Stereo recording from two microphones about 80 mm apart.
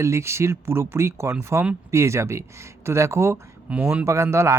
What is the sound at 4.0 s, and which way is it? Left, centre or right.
Speech, right.